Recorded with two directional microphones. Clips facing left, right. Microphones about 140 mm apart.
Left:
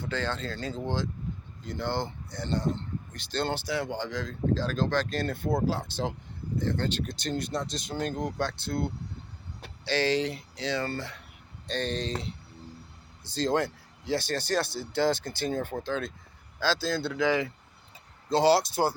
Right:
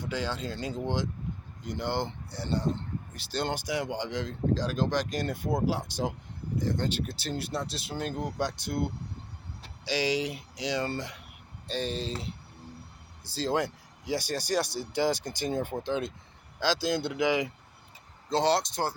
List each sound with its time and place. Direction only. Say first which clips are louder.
0.0 s speech: left 1 dB; 10° right (ahead or behind)
13.2 s speech: left 2 dB; 10° right (ahead or behind)
18.3 s speech: left 3 dB; centre (ahead or behind)